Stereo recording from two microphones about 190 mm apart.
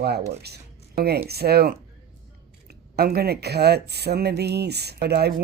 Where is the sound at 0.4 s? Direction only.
60° right (ahead or behind).